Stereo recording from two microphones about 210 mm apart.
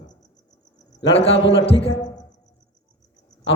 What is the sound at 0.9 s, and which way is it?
A man's voice, 25° left (ahead or behind).